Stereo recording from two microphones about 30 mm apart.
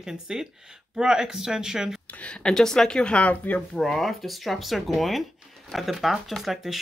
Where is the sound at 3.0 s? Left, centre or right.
Left.